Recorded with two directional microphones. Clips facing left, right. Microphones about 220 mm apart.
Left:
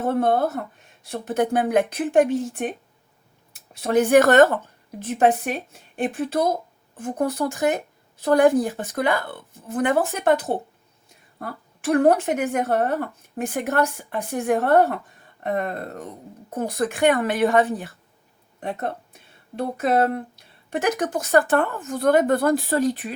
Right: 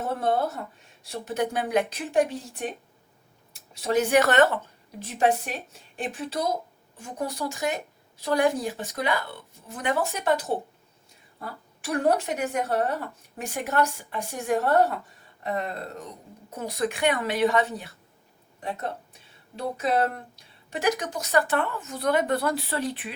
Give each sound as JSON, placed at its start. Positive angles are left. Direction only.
{"t": 0.0, "sound": "speech", "side_deg": 55}
{"t": 3.8, "sound": "a woman's voice", "side_deg": 50}